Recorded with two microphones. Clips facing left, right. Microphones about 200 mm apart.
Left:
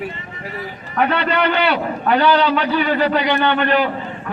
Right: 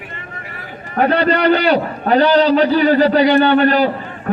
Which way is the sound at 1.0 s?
40° right (ahead or behind).